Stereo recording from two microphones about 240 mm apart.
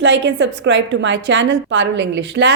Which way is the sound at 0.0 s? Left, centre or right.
Right.